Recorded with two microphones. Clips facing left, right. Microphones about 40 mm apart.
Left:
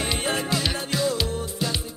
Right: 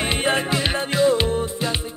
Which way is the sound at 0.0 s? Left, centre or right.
Right.